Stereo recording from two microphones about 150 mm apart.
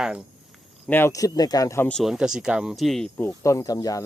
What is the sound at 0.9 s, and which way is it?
Speech, 15° left (ahead or behind).